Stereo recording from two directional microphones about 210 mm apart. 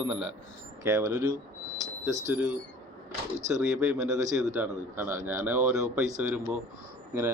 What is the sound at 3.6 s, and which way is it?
A man's voice, 5° right (ahead or behind).